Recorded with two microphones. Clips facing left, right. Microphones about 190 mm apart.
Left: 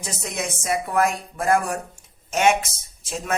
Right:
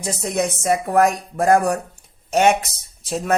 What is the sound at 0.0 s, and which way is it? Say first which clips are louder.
Speech: right 8 dB; 35° right (ahead or behind).